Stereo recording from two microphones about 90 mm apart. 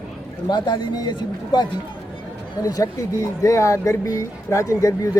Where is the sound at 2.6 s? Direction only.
45° left (ahead or behind).